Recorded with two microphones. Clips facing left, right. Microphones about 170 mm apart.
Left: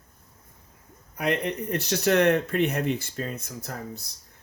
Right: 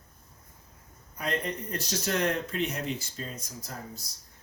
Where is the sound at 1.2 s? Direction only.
65° left (ahead or behind).